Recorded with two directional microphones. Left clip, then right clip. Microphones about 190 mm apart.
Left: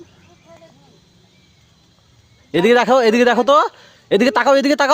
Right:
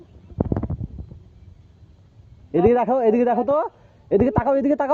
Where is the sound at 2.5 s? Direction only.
35° left (ahead or behind).